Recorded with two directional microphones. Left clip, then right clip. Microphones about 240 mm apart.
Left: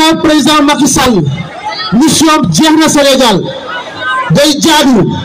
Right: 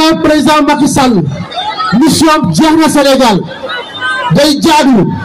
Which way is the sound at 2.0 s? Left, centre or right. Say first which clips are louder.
Left 1 dB; left.